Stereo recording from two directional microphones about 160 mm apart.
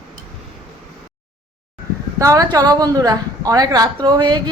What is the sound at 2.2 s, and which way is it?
A woman's voice, 20° right (ahead or behind).